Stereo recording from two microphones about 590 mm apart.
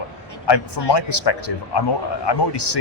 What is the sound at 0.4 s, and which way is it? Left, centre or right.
Speech, left.